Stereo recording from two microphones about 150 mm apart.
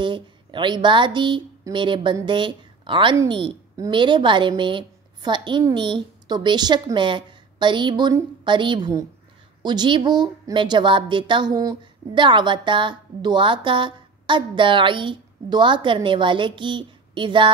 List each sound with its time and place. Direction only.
0.0 s a woman's voice: 30° right (ahead or behind)